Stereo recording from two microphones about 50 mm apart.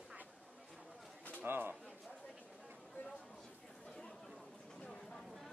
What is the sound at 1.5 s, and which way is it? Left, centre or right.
Speech, right.